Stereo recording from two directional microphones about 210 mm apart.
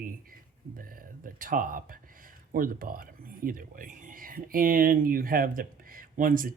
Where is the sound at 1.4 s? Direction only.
40° right (ahead or behind).